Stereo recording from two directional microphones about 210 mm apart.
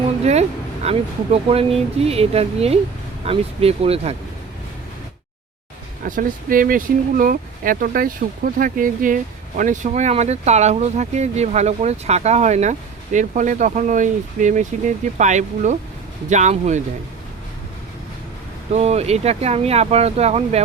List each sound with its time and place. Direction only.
0.3 s speech: 30° right (ahead or behind)
6.1 s speech: 40° right (ahead or behind)
18.7 s speech: 30° right (ahead or behind)